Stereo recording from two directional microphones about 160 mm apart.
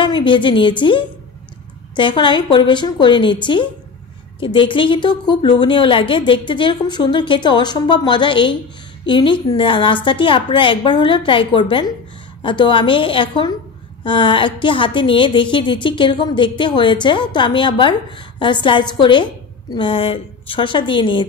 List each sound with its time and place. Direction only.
0.0 s a woman's voice: 30° left (ahead or behind)